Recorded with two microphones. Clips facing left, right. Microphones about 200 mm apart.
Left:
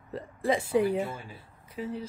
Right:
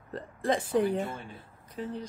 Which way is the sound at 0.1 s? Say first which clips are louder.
Left 1 dB; 5° left (ahead or behind).